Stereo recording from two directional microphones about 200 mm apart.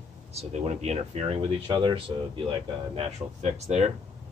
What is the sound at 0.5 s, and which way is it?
Speech, 35° right (ahead or behind).